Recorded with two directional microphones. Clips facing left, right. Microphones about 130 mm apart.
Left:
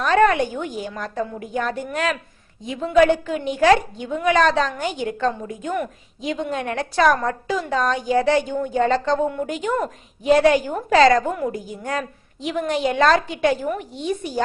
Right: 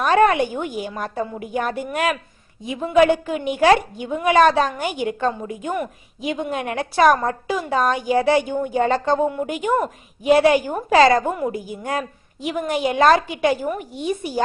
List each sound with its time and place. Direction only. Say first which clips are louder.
0.0 s a woman's voice: right 1 dB; 15° right (ahead or behind)